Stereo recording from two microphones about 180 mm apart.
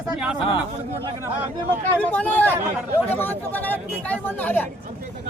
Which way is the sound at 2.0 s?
5° left (ahead or behind).